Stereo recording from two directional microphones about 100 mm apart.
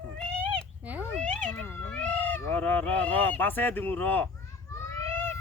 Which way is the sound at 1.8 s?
10° left (ahead or behind).